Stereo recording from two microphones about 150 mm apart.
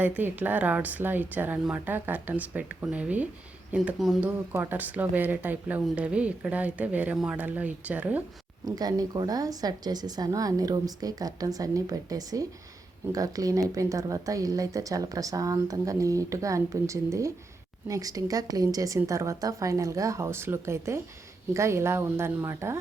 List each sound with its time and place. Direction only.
0.2 s speech: 15° right (ahead or behind)
4.3 s speech: 15° right (ahead or behind)
8.6 s speech: 25° right (ahead or behind)